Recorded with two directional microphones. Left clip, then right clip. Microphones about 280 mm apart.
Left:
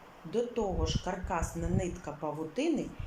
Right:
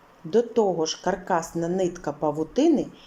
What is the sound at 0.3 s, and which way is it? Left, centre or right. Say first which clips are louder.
A woman's voice: right 11 dB; centre.